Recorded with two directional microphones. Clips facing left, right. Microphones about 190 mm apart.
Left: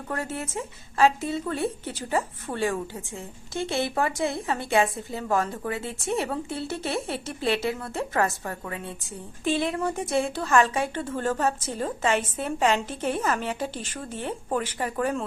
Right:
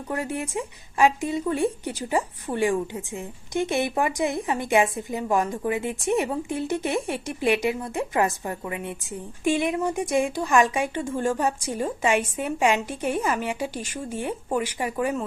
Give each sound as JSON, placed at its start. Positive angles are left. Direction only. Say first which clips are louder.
{"t": 0.1, "sound": "speech", "louder": "right 3 dB", "side_deg": -15}